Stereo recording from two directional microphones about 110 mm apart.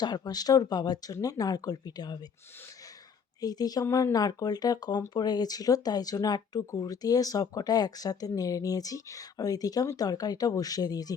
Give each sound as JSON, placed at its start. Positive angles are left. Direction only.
{"t": 0.0, "sound": "speech", "side_deg": 40}
{"t": 3.4, "sound": "speech", "side_deg": 35}